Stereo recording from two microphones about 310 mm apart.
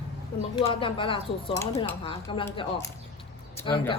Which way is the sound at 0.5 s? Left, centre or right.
Centre.